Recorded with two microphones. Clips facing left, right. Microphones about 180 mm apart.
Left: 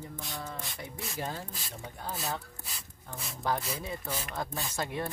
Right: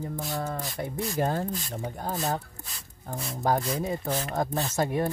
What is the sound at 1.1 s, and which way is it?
Speech, 50° right (ahead or behind).